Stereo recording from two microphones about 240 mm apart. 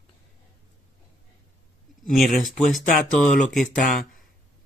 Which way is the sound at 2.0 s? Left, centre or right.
Centre.